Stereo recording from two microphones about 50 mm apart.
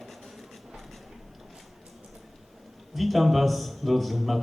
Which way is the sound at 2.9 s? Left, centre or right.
Centre.